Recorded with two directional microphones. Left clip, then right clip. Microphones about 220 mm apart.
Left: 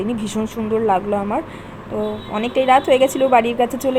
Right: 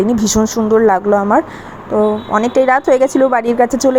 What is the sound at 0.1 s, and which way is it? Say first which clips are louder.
Speech: right 9 dB; 45° right (ahead or behind).